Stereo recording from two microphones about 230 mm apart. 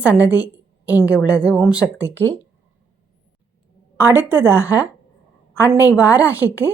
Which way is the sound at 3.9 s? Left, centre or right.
Centre.